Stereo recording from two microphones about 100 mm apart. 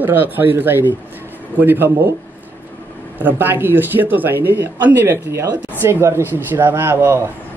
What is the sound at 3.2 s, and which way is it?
Speech, 20° right (ahead or behind).